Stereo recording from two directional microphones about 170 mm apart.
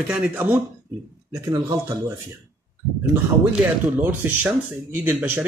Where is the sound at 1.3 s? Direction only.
20° right (ahead or behind).